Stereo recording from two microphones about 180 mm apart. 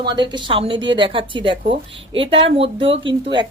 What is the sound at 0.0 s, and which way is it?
Speech, 25° right (ahead or behind).